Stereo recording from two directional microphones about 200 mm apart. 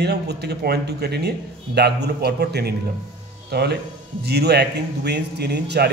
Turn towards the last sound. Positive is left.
turn(degrees=-55)  # may be behind; listen again after turning